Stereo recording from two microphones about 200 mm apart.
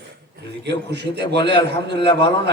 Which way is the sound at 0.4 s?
55° right (ahead or behind).